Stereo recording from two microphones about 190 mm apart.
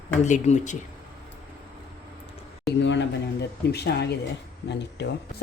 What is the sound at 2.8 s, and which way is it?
Speech, 70° left (ahead or behind).